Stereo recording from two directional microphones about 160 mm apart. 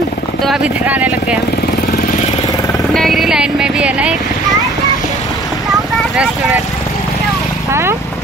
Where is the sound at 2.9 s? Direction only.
Centre (ahead or behind).